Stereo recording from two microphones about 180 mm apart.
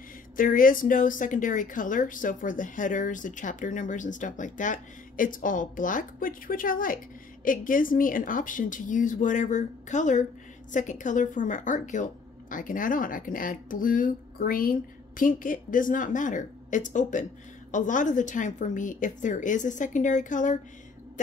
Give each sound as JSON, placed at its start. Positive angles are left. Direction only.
{"t": 0.4, "sound": "speech", "side_deg": 50}